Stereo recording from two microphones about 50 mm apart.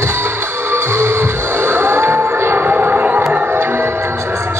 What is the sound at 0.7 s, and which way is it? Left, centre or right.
Music, right.